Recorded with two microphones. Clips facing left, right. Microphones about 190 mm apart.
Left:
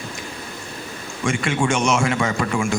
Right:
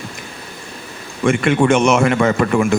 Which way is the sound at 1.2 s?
60° right (ahead or behind).